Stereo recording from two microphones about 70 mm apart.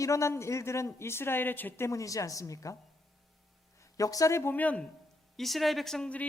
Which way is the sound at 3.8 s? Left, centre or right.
Left.